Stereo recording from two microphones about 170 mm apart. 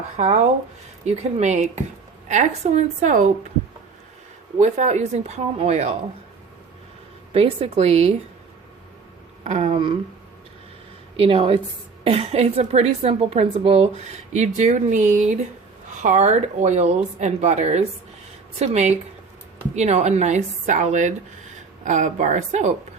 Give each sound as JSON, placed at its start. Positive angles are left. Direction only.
{"t": 0.2, "sound": "a woman's voice", "side_deg": -40}
{"t": 4.6, "sound": "a woman's voice", "side_deg": -45}
{"t": 7.3, "sound": "a woman's voice", "side_deg": -35}
{"t": 9.4, "sound": "speech", "side_deg": -45}
{"t": 9.7, "sound": "speech", "side_deg": -30}
{"t": 11.2, "sound": "a woman's voice", "side_deg": -30}